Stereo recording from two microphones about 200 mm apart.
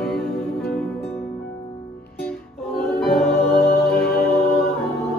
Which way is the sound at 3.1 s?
50° left (ahead or behind).